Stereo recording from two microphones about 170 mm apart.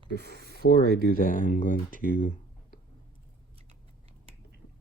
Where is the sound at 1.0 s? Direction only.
55° left (ahead or behind).